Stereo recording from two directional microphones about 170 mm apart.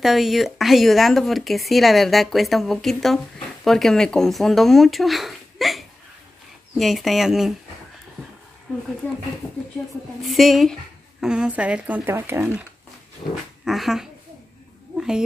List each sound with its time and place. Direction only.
0.0 s speech: centre (ahead or behind)
9.0 s speech: 10° left (ahead or behind)
10.2 s speech: centre (ahead or behind)
13.2 s speech: 25° left (ahead or behind)
13.7 s speech: centre (ahead or behind)
15.0 s a sound: 5° right (ahead or behind)